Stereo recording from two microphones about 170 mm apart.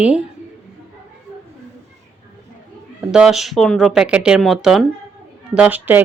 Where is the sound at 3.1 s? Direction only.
Centre (ahead or behind).